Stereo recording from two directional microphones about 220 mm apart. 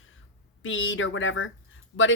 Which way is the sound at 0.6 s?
60° left (ahead or behind).